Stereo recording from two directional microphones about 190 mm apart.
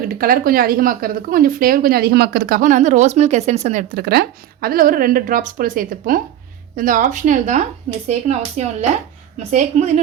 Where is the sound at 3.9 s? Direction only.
55° right (ahead or behind); by 10.0 s 35° right (ahead or behind).